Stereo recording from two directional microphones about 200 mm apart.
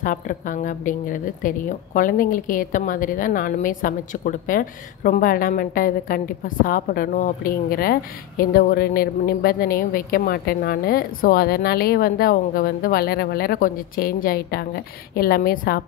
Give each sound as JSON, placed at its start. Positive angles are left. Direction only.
{"t": 0.0, "sound": "a woman's voice", "side_deg": 40}